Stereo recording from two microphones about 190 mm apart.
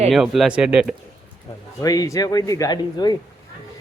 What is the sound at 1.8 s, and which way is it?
Speech, 20° left (ahead or behind).